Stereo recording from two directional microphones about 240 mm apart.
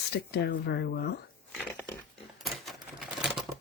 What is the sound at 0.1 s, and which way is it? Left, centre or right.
Speech, left.